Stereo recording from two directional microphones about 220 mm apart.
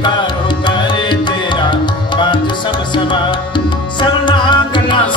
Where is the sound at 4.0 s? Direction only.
20° left (ahead or behind).